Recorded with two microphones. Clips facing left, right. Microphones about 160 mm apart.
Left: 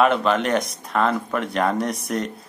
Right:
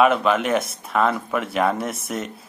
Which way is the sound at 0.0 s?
5° right (ahead or behind).